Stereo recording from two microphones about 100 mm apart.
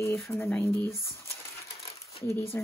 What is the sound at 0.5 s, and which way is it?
Speech, 15° left (ahead or behind).